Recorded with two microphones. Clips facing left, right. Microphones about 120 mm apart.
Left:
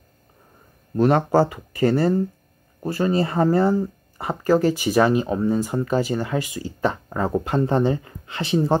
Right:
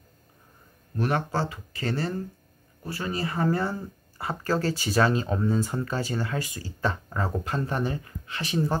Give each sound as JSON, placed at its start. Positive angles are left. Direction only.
{"t": 0.9, "sound": "speech", "side_deg": 25}
{"t": 7.2, "sound": "speech", "side_deg": 35}
{"t": 7.4, "sound": "speech", "side_deg": 25}